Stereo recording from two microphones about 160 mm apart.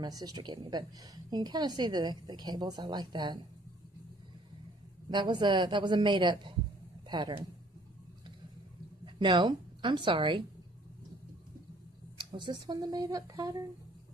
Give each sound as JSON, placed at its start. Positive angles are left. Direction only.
{"t": 0.0, "sound": "a woman's voice", "side_deg": -25}
{"t": 5.1, "sound": "a woman's voice", "side_deg": -30}
{"t": 9.0, "sound": "a woman's voice", "side_deg": -30}
{"t": 12.3, "sound": "a woman's voice", "side_deg": -30}